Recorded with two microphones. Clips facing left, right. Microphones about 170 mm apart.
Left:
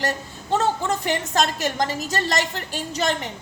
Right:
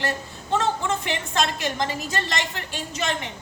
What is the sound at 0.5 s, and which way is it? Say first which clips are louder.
A woman's voice: left 2 dB; 40° left (ahead or behind).